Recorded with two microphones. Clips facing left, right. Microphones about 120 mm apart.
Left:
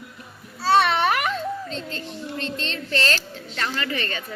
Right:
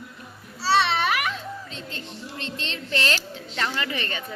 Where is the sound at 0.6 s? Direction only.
50° left (ahead or behind).